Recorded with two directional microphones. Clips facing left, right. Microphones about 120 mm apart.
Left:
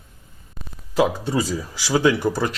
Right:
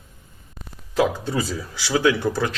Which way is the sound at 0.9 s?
10° left (ahead or behind).